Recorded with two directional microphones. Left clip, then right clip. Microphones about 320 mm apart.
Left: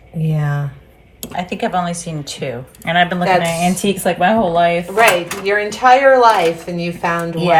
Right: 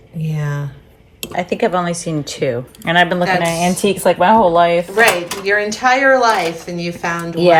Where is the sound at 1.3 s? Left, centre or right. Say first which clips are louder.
Right 2 dB; right.